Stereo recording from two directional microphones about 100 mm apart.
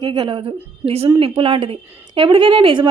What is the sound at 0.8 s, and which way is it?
Speech, 90° right.